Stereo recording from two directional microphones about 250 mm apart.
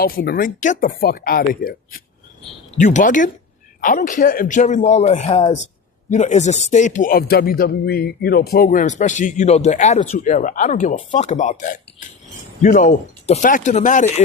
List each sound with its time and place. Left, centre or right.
0.0 s speech: left